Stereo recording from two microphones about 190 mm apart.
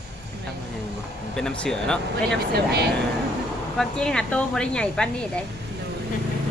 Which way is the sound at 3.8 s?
5° left (ahead or behind).